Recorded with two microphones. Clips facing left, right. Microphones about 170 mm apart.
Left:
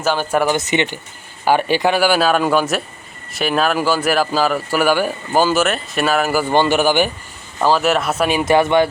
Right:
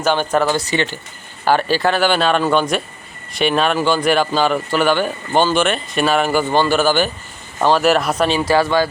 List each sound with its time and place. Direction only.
0.0 s a man's voice: 5° left (ahead or behind)
0.5 s a man's voice: 20° left (ahead or behind); by 6.5 s 5° left (ahead or behind)
6.5 s a man's voice: 15° left (ahead or behind)
7.6 s speech: centre (ahead or behind)
8.4 s speech: 20° left (ahead or behind)